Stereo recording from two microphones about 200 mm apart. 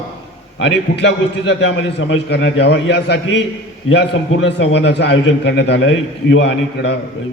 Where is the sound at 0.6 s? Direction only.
60° left (ahead or behind).